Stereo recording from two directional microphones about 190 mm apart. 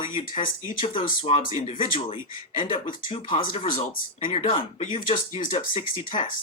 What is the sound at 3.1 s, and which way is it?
Speech, 25° left (ahead or behind).